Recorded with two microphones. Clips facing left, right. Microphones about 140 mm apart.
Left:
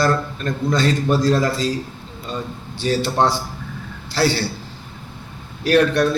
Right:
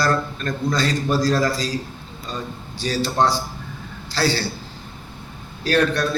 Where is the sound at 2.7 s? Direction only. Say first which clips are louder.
Left 2 dB; 25° left (ahead or behind).